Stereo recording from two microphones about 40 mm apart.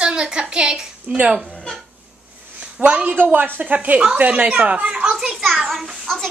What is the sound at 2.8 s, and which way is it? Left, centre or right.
Speech, right.